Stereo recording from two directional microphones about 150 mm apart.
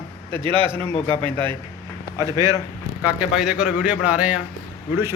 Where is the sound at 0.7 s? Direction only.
15° left (ahead or behind).